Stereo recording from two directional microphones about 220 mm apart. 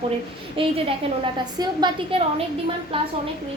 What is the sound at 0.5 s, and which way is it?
A woman's voice, 25° right (ahead or behind).